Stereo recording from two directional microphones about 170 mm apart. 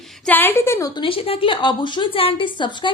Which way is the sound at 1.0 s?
30° left (ahead or behind).